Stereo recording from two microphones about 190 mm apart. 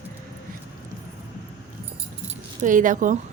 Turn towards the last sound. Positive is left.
turn(degrees=-45)  # may be behind; listen again after turning